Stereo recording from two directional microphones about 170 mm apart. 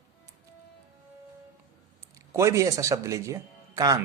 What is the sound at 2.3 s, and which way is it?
Speech, 15° right (ahead or behind).